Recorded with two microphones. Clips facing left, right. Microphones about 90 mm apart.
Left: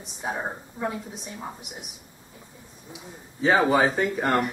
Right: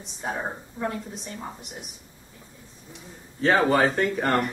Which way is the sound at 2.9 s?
5° left (ahead or behind).